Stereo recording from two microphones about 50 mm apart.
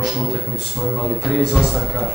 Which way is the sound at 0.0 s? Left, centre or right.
Centre.